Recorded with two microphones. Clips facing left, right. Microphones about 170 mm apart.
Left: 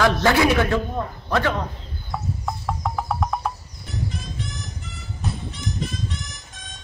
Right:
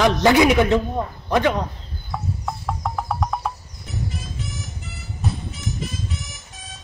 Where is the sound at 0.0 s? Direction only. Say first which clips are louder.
Right 3 dB; 15° right (ahead or behind).